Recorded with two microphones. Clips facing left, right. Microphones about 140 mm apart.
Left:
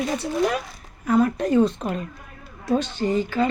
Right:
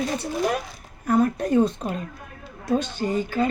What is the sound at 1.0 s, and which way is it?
Speech, 50° right (ahead or behind).